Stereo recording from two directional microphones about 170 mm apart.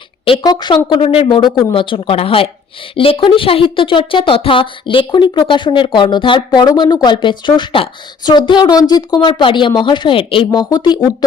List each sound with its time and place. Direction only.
0.3 s a woman's voice: 25° left (ahead or behind)